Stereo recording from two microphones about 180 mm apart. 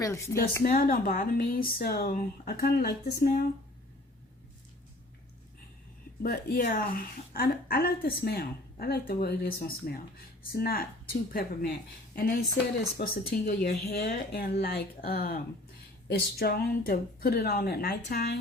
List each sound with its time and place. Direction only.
0.6 s a woman's voice: 50° left (ahead or behind)
6.2 s a woman's voice: 55° left (ahead or behind)